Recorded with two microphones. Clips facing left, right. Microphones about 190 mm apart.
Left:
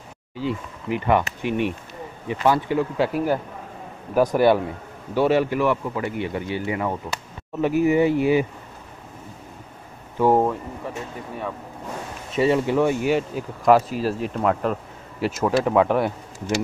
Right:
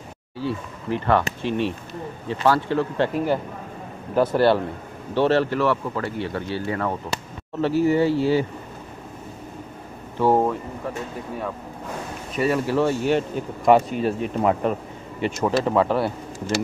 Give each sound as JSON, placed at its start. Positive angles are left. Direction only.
{"t": 0.4, "sound": "speech", "side_deg": 15}
{"t": 10.2, "sound": "speech", "side_deg": 10}
{"t": 12.3, "sound": "speech", "side_deg": 25}